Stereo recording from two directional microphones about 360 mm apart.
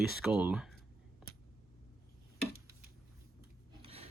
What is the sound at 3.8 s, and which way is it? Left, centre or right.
Filing, centre.